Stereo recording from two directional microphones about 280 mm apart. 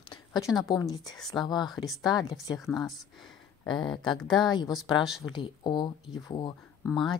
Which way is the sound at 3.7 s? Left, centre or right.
Centre.